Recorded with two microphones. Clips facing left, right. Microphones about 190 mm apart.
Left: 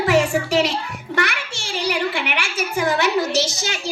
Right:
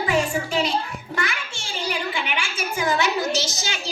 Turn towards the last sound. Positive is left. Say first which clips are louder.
# left 4 dB
turn(degrees=65)  # may be behind; listen again after turning